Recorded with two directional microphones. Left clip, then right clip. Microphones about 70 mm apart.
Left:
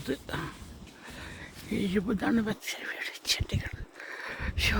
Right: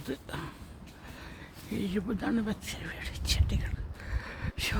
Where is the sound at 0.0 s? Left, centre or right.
Left.